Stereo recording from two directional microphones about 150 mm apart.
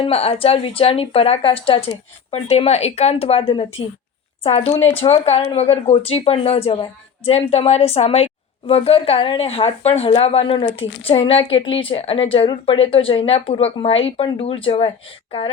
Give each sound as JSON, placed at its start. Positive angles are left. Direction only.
{"t": 0.0, "sound": "a woman's voice", "side_deg": 40}